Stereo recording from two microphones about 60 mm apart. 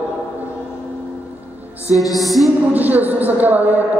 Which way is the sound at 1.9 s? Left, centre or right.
Centre.